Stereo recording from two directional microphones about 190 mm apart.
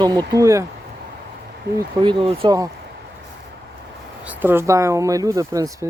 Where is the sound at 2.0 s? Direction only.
25° right (ahead or behind).